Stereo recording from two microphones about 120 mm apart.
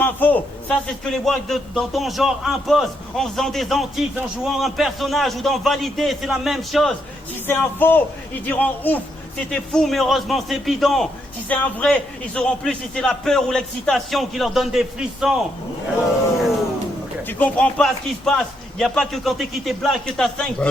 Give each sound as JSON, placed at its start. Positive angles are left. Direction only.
{"t": 0.0, "sound": "a sound", "side_deg": 15}
{"t": 0.9, "sound": "a man's voice", "side_deg": 0}
{"t": 7.4, "sound": "a man's voice", "side_deg": 15}
{"t": 17.2, "sound": "a man's voice", "side_deg": 10}